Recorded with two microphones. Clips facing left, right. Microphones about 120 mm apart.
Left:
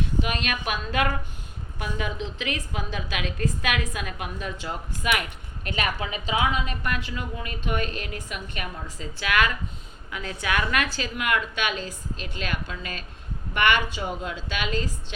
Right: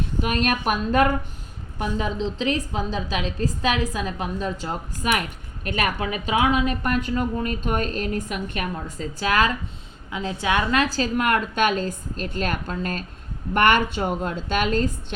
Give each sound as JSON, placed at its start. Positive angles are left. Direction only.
{"t": 0.2, "sound": "a woman's voice", "side_deg": -45}
{"t": 1.8, "sound": "a woman's voice", "side_deg": -30}